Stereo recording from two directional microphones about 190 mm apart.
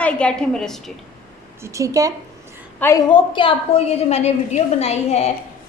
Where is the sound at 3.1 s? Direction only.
25° left (ahead or behind).